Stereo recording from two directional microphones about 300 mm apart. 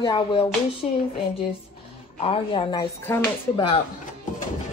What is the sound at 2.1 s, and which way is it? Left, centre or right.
Speech, centre.